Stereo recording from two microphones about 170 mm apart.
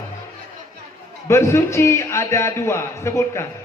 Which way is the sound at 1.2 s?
15° left (ahead or behind).